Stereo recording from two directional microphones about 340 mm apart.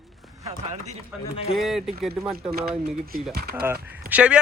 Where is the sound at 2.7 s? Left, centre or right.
Right.